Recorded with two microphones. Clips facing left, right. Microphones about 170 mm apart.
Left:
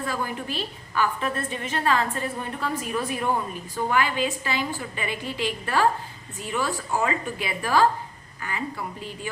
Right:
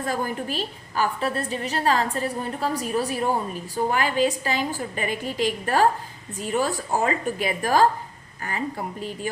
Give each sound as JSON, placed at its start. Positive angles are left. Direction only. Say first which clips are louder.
{"t": 0.0, "sound": "a woman's voice", "louder": "right 3 dB", "side_deg": -45}